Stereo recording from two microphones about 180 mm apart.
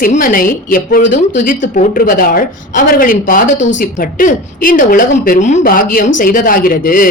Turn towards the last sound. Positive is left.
turn(degrees=50)  # may be behind; listen again after turning